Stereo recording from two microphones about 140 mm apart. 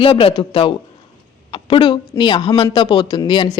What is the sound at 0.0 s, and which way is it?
Speech, 40° left (ahead or behind).